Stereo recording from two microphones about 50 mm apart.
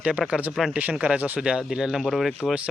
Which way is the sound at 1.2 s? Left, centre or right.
Right.